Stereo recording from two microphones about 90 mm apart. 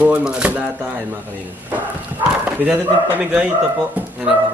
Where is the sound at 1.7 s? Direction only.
20° right (ahead or behind).